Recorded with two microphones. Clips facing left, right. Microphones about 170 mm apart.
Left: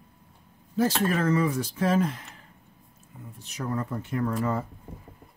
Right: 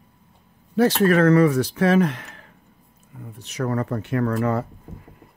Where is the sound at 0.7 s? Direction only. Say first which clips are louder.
Right 7 dB; 70° right (ahead or behind).